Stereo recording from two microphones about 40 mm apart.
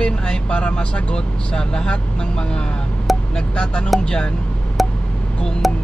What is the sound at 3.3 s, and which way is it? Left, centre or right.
Speech, left.